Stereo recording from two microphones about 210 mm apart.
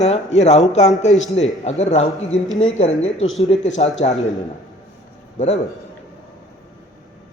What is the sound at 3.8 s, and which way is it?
Speech, 30° left (ahead or behind).